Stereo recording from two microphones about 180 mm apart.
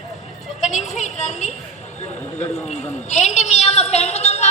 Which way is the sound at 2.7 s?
40° left (ahead or behind).